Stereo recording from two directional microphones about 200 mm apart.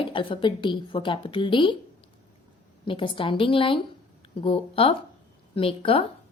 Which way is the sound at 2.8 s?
25° left (ahead or behind).